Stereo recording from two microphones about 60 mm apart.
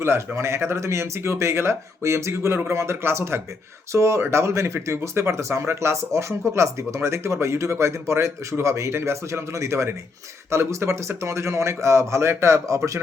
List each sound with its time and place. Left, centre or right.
0.3 s speech: right